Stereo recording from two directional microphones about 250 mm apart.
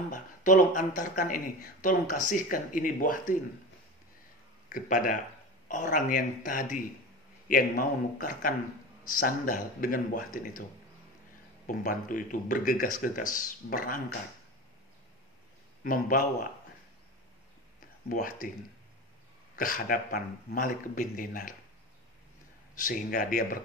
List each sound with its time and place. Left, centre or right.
0.1 s speech: left
4.7 s speech: left
9.8 s speech: left
11.6 s speech: left
15.8 s speech: left
18.0 s speech: left
19.5 s speech: left
22.8 s speech: left